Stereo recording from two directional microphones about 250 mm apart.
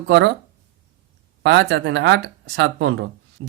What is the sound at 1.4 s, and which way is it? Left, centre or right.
Speech, right.